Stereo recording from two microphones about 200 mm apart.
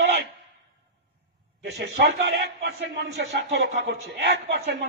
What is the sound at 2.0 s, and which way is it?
A man's voice, 55° right (ahead or behind).